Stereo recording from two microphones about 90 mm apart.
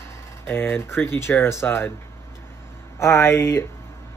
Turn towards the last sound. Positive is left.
turn(degrees=30)  # may be behind; listen again after turning